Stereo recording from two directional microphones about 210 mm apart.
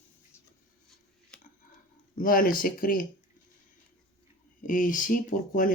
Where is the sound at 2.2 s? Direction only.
40° left (ahead or behind).